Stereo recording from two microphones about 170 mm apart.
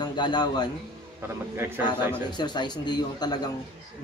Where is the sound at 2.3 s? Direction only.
25° left (ahead or behind).